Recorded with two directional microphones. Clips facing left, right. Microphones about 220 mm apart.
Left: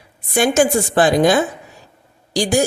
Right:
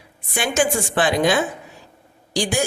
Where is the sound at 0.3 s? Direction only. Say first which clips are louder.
Left 6 dB; 40° left (ahead or behind).